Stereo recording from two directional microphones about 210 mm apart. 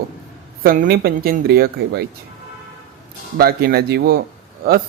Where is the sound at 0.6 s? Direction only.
45° right (ahead or behind).